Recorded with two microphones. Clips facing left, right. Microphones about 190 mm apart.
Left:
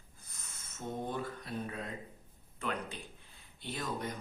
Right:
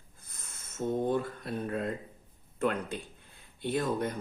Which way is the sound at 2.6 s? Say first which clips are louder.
Right 8 dB; 55° right (ahead or behind).